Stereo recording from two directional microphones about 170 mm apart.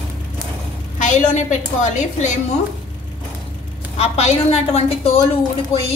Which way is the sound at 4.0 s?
40° left (ahead or behind).